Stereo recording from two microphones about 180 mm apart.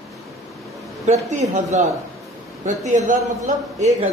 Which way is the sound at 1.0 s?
40° right (ahead or behind).